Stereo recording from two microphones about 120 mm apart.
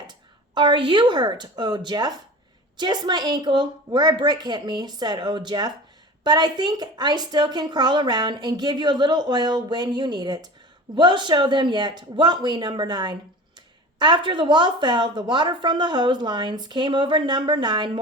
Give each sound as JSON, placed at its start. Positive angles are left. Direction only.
{"t": 0.1, "sound": "a woman's voice", "side_deg": -40}